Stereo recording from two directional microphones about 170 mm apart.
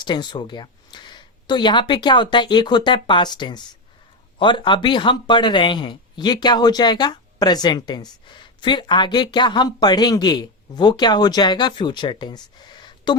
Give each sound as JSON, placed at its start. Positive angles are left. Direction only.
{"t": 0.0, "sound": "speech", "side_deg": 25}